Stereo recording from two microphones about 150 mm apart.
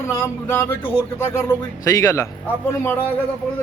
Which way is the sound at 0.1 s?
15° left (ahead or behind).